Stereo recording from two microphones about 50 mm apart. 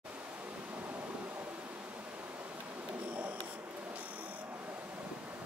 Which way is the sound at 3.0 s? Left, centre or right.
Right.